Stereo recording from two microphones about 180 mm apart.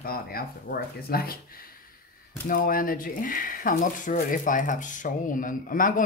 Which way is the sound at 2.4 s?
50° left (ahead or behind).